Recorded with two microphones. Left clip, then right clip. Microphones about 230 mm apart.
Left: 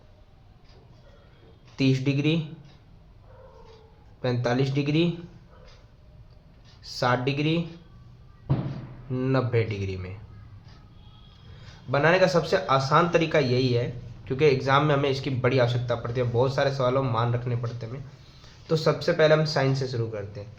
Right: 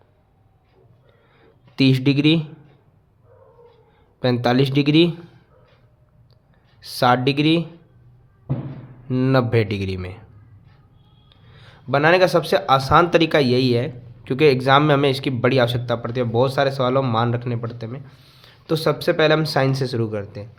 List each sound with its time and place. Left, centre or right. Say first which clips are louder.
1.7 s speech: right 7 dB; right
4.2 s speech: right 7 dB; right
6.8 s speech: right 8 dB; right
9.0 s speech: right 7 dB; right
11.9 s speech: right 5 dB; right